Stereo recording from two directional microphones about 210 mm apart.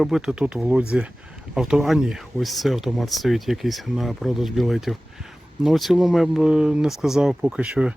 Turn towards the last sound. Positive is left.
turn(degrees=-5)  # may be behind; listen again after turning